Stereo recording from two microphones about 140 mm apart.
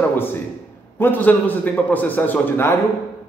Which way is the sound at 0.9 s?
15° left (ahead or behind).